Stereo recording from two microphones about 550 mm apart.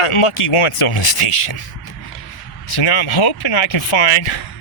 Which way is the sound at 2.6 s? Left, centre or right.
Left.